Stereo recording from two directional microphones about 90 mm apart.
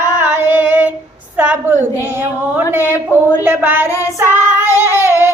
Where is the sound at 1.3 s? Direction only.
15° right (ahead or behind).